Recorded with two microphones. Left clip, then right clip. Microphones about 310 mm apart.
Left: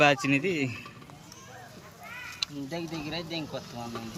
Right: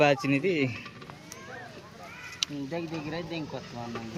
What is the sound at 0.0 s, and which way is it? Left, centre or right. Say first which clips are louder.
Speech: left 1 dB; centre.